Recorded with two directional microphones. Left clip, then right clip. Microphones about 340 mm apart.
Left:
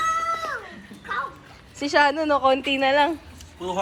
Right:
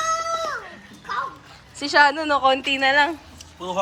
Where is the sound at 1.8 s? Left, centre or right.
Centre.